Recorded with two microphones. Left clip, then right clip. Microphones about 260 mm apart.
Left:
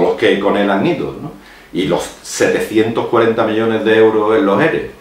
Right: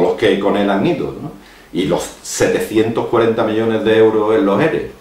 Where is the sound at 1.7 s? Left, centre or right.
Centre.